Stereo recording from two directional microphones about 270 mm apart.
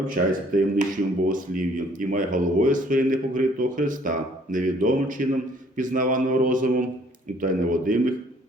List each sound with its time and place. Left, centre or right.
0.1 s speech: right